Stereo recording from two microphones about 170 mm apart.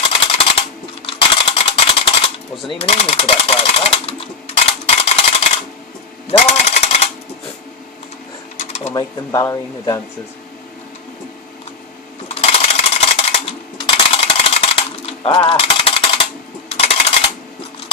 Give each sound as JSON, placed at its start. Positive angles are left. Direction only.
{"t": 0.0, "sound": "a sound", "side_deg": 35}
{"t": 6.2, "sound": "jackhammer", "side_deg": 40}
{"t": 8.5, "sound": "sewing machine", "side_deg": 40}
{"t": 8.9, "sound": "speech", "side_deg": 20}
{"t": 12.3, "sound": "coin", "side_deg": 35}
{"t": 16.6, "sound": "a sound", "side_deg": 35}